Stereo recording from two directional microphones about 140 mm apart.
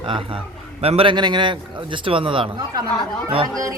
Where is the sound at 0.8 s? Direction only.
45° right (ahead or behind).